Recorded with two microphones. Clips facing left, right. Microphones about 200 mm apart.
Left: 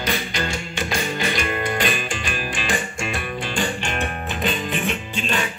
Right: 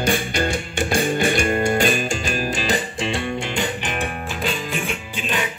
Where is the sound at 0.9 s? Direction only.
50° right (ahead or behind).